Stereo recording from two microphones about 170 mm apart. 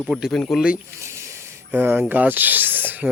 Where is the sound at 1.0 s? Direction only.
15° right (ahead or behind).